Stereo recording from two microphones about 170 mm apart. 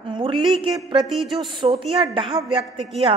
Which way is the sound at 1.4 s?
30° right (ahead or behind).